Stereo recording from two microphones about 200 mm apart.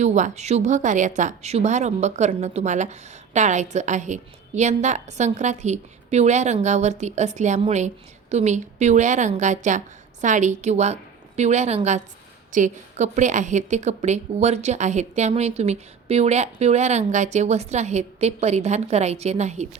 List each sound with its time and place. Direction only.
0.0 s a woman's voice: 35° right (ahead or behind)